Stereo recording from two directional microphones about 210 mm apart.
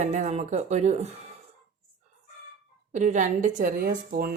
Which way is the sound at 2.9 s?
35° right (ahead or behind).